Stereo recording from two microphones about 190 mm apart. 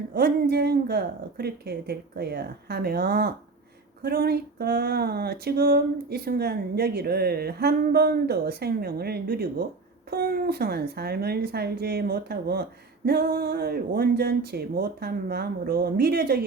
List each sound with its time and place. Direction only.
0.1 s speech: 55° right (ahead or behind)